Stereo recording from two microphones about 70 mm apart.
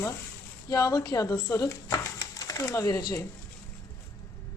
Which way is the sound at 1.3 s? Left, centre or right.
Left.